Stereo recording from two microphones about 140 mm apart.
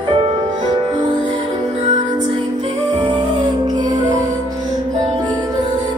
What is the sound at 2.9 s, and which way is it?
Music, 35° right (ahead or behind).